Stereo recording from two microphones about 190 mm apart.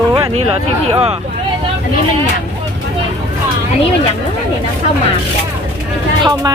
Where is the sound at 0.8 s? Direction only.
30° right (ahead or behind).